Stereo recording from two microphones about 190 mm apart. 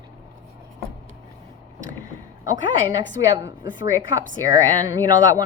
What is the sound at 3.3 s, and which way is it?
Speech, 20° right (ahead or behind).